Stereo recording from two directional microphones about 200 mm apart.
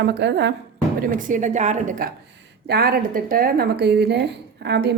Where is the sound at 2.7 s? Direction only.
50° right (ahead or behind).